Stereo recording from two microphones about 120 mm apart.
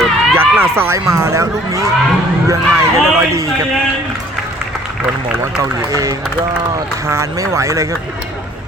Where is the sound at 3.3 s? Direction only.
25° right (ahead or behind).